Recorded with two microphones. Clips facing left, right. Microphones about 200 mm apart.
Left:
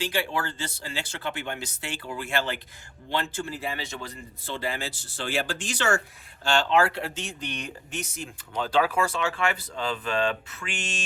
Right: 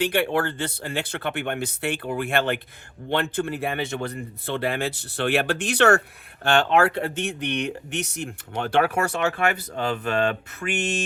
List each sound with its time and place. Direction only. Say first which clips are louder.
0.0 s speech: right 6 dB; 60° right (ahead or behind)